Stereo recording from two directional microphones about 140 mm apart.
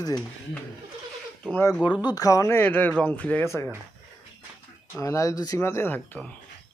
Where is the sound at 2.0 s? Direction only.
25° left (ahead or behind); by 3.5 s 10° left (ahead or behind).